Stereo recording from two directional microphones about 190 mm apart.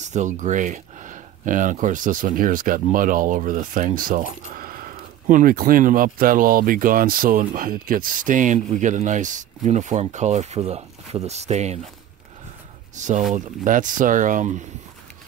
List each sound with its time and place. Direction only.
0.0 s speech: 40° right (ahead or behind)
12.9 s speech: 40° right (ahead or behind)